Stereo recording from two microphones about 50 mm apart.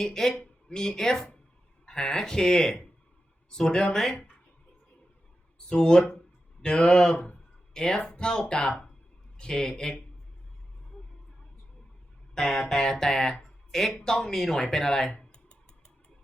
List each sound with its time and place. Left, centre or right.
0.0 s speech: centre
5.6 s speech: centre
12.3 s speech: centre
15.2 s typing: centre